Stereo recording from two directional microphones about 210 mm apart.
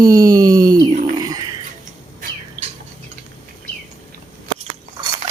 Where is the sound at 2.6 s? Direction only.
10° right (ahead or behind).